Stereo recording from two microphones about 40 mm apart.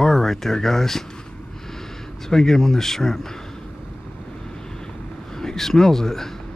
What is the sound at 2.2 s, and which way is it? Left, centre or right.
Speech, centre.